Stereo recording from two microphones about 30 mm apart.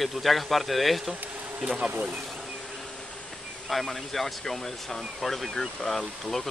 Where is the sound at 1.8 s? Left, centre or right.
Right.